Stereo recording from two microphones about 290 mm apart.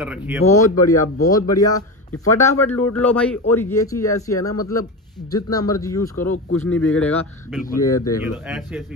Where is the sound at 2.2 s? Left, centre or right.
Centre.